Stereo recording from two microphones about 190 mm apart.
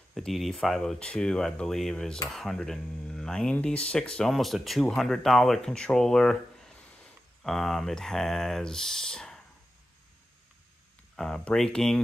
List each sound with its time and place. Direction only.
0.1 s speech: centre (ahead or behind)
11.1 s speech: 5° left (ahead or behind)